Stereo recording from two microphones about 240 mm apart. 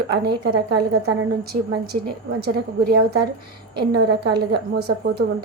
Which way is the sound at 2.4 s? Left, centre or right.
Right.